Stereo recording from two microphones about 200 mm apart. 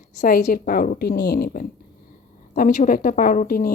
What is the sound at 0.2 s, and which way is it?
A woman's voice, 45° left (ahead or behind).